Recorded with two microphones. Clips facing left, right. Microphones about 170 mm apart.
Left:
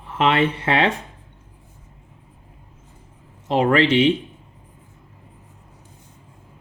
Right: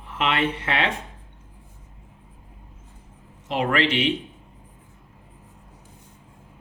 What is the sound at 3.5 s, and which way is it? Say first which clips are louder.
Speech: left 6 dB; 35° left (ahead or behind).